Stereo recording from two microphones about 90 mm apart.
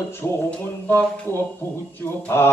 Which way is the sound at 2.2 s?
25° left (ahead or behind).